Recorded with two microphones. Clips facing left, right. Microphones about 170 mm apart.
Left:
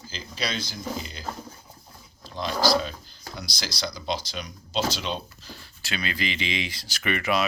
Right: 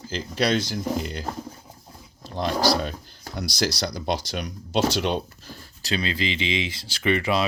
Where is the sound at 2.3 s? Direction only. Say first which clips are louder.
Right 1 dB; 60° right (ahead or behind).